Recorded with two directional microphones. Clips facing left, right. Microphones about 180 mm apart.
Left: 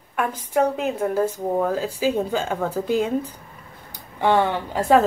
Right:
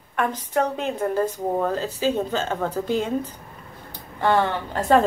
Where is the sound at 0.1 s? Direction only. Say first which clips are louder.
Left 1 dB; 10° left (ahead or behind).